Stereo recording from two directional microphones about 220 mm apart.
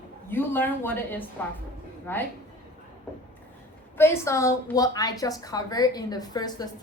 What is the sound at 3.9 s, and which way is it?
A woman's voice, 10° left (ahead or behind).